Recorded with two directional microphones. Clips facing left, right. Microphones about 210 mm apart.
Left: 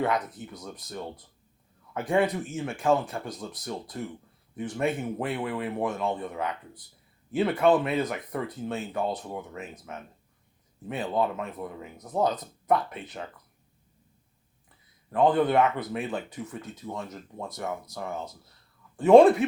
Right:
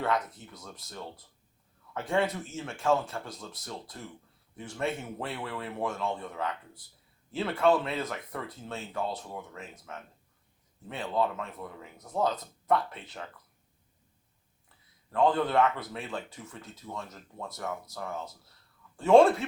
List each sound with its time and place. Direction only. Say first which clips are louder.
0.0 s speech: left 3 dB; 15° left (ahead or behind)
15.1 s speech: left 3 dB; 20° left (ahead or behind)
18.9 s speech: left 4 dB; 15° left (ahead or behind)